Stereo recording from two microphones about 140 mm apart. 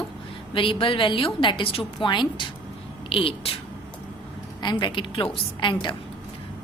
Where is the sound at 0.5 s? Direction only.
40° left (ahead or behind).